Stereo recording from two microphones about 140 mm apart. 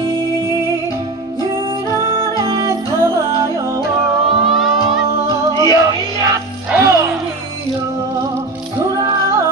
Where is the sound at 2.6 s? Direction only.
20° right (ahead or behind).